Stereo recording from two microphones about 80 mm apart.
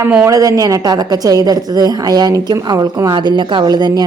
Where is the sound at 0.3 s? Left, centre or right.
Right.